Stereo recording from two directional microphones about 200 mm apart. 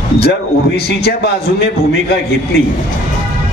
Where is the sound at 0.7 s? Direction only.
55° left (ahead or behind).